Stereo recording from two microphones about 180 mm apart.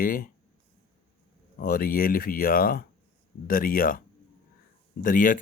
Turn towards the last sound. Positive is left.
turn(degrees=50)  # may be behind; listen again after turning